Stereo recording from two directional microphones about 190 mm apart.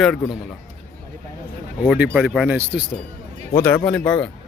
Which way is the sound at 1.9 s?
5° right (ahead or behind).